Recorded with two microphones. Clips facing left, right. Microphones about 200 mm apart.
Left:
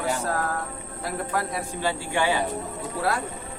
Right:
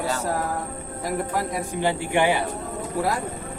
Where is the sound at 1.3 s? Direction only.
15° right (ahead or behind).